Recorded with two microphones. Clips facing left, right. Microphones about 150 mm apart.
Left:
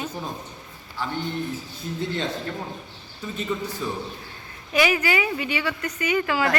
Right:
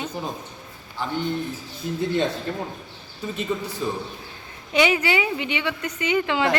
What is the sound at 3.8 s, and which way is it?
A man's voice, 30° right (ahead or behind).